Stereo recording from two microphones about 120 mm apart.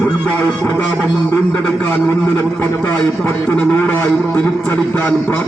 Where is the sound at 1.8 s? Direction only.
15° left (ahead or behind).